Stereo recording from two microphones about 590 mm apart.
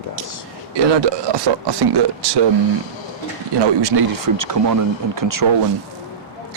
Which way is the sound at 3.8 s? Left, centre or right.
Right.